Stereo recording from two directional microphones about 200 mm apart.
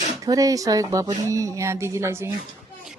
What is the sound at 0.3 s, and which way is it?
Speech, 15° right (ahead or behind).